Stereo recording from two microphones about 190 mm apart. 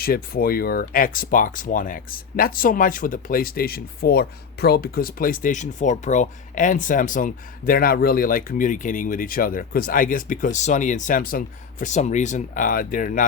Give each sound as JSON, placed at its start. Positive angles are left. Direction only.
{"t": 0.0, "sound": "speech", "side_deg": 50}